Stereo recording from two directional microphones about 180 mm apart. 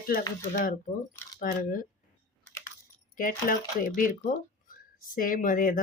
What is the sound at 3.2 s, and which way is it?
Speech, 50° left (ahead or behind).